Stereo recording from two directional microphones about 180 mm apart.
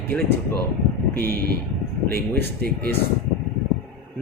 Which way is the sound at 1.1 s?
60° right (ahead or behind).